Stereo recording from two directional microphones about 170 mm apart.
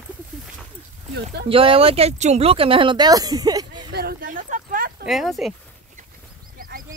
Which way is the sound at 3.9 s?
65° right (ahead or behind).